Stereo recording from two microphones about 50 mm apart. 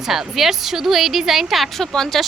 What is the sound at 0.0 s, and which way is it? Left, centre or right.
A woman's voice, centre.